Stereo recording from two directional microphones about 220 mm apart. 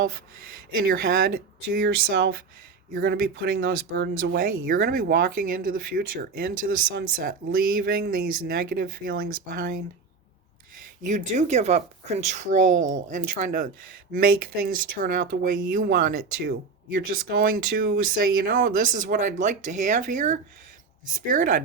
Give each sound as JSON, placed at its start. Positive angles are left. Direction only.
{"t": 0.4, "sound": "speech", "side_deg": -45}
{"t": 11.0, "sound": "speech", "side_deg": -35}